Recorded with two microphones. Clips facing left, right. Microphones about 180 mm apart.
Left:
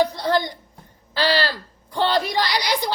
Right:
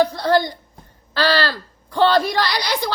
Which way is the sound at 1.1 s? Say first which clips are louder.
Right 2 dB; 15° left (ahead or behind).